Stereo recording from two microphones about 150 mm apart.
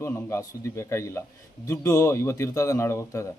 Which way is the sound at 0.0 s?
15° left (ahead or behind).